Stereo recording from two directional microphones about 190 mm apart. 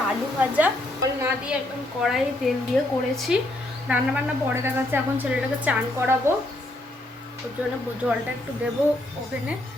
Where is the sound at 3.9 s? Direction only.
10° right (ahead or behind).